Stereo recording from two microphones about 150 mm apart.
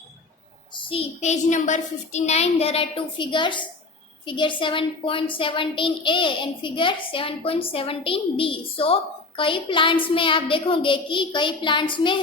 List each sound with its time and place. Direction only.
0.7 s a child's voice: 35° left (ahead or behind)